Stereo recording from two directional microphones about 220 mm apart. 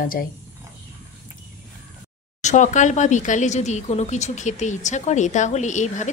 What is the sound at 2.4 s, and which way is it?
Speech, 35° left (ahead or behind).